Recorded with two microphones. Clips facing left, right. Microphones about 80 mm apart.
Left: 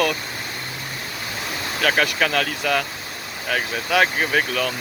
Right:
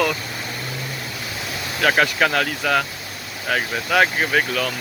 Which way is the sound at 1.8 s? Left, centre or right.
Centre.